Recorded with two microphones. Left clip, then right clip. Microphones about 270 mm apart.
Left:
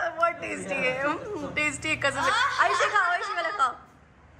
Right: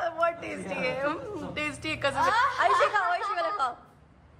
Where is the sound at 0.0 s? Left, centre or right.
Centre.